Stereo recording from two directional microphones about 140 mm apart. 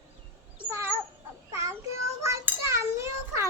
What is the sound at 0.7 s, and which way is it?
Dog, 20° right (ahead or behind).